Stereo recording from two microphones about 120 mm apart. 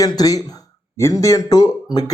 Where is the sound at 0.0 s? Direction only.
30° left (ahead or behind).